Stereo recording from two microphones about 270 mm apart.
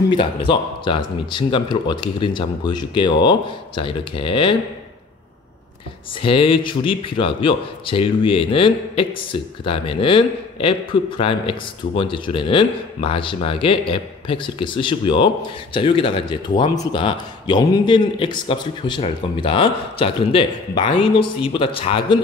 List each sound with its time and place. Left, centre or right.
0.1 s speech: centre
6.2 s a man's voice: centre